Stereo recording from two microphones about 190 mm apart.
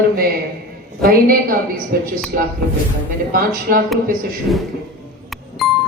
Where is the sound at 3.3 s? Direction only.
50° right (ahead or behind).